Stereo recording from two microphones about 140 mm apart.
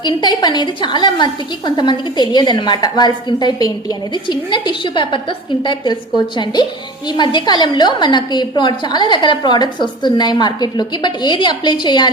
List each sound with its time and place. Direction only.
0.0 s a woman's voice: 30° left (ahead or behind)